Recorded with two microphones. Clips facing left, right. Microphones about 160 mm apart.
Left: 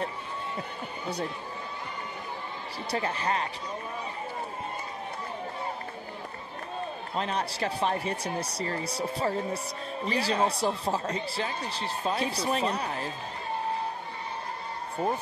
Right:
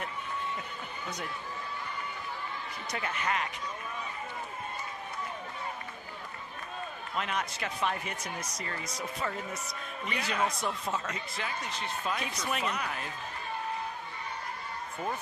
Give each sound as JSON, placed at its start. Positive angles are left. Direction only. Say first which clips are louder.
{"t": 1.0, "sound": "speech", "louder": "left 7 dB", "side_deg": 30}
{"t": 2.9, "sound": "speech", "louder": "left 4 dB", "side_deg": 30}
{"t": 7.2, "sound": "speech", "louder": "left 4 dB", "side_deg": 35}